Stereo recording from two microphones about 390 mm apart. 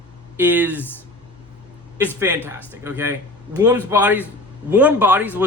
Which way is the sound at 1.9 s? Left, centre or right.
Centre.